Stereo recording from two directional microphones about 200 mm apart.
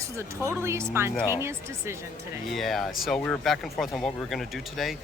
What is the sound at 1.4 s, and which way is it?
Speech, 15° right (ahead or behind).